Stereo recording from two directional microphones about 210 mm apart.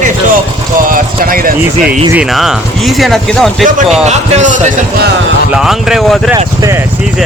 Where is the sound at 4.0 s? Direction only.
30° right (ahead or behind).